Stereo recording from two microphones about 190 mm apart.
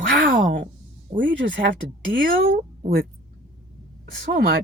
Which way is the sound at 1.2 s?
70° right (ahead or behind).